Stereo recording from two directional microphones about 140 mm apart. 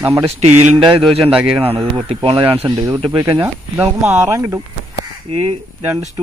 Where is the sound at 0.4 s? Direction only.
50° right (ahead or behind).